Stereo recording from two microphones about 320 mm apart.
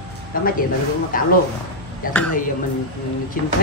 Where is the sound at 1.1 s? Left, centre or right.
Left.